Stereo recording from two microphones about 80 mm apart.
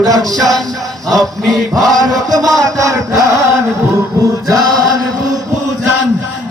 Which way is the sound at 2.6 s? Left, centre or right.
Right.